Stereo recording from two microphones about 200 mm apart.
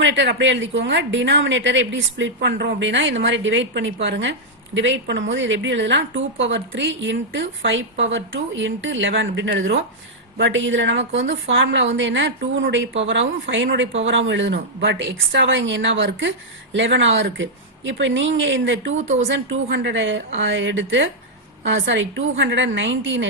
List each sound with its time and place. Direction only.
0.0 s a woman's voice: 65° right (ahead or behind)